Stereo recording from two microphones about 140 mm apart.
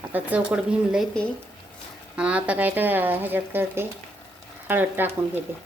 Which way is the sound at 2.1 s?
10° right (ahead or behind).